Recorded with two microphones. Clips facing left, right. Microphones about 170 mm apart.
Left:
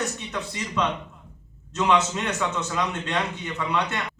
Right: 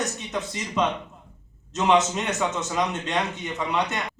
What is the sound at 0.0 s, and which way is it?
A man's voice, 20° right (ahead or behind).